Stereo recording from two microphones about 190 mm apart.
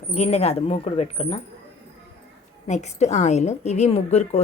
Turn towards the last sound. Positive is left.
turn(degrees=35)  # may be behind; listen again after turning